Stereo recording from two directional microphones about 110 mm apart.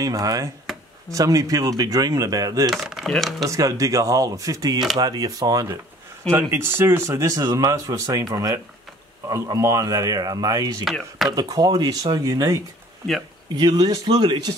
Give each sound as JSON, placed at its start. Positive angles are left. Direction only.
{"t": 0.0, "sound": "speech", "side_deg": -35}
{"t": 2.7, "sound": "speech", "side_deg": 0}
{"t": 3.4, "sound": "speech", "side_deg": -30}
{"t": 6.5, "sound": "speech", "side_deg": -20}
{"t": 10.9, "sound": "speech", "side_deg": 0}
{"t": 11.3, "sound": "speech", "side_deg": -35}
{"t": 13.6, "sound": "speech", "side_deg": -40}